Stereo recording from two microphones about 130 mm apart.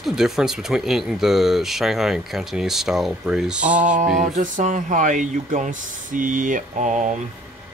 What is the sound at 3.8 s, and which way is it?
Male singing, 80° right.